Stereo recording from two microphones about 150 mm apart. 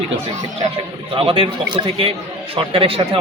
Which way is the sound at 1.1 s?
35° right (ahead or behind).